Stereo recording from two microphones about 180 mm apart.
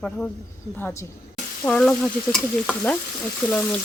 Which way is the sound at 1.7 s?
5° left (ahead or behind).